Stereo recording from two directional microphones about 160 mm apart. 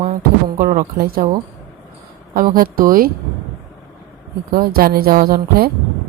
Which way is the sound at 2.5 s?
60° right (ahead or behind).